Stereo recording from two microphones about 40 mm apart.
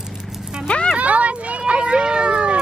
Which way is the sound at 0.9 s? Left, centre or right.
Right.